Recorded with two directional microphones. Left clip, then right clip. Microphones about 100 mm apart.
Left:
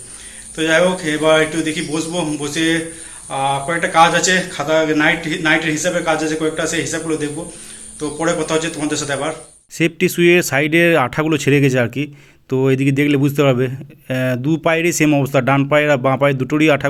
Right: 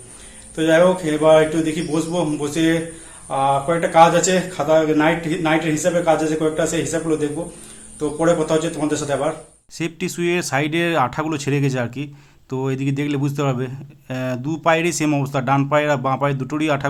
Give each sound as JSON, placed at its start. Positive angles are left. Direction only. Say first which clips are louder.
{"t": 0.5, "sound": "speech", "louder": "even", "side_deg": -20}
{"t": 9.7, "sound": "a man's voice", "louder": "left 9 dB", "side_deg": 30}